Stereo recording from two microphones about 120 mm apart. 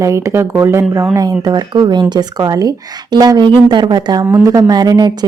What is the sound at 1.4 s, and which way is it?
Speech, 35° right (ahead or behind).